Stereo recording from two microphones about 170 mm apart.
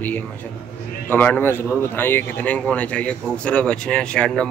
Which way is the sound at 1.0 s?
10° left (ahead or behind).